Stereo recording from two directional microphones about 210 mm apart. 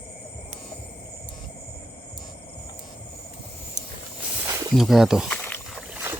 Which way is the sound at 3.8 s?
35° right (ahead or behind).